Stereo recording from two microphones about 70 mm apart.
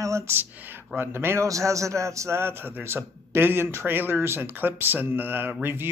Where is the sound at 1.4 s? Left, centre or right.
Right.